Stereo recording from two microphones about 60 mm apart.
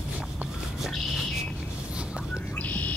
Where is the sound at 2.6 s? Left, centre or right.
Left.